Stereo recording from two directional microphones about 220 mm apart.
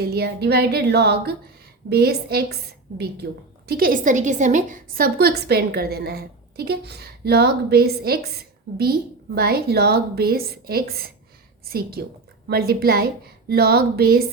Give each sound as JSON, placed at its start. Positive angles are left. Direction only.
{"t": 0.0, "sound": "a woman's voice", "side_deg": -45}